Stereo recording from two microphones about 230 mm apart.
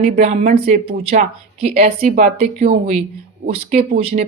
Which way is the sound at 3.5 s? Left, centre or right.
Right.